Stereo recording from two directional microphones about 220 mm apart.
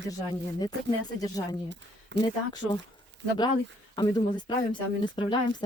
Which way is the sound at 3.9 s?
20° left (ahead or behind).